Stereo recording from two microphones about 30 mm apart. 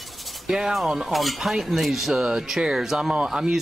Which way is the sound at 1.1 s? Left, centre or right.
Centre.